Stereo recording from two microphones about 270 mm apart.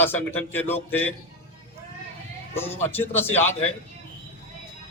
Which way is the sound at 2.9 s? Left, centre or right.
Centre.